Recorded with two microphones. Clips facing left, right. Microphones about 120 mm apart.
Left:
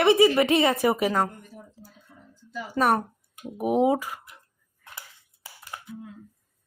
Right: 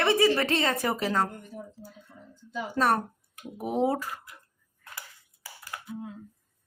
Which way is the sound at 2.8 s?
5° left (ahead or behind).